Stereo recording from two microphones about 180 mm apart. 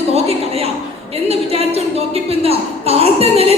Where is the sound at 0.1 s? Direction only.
35° right (ahead or behind).